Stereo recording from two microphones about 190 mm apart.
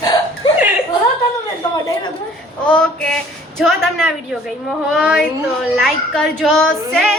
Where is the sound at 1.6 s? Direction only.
20° left (ahead or behind).